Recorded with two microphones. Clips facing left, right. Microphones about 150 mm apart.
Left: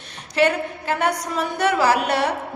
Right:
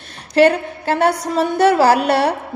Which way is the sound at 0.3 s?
35° right (ahead or behind).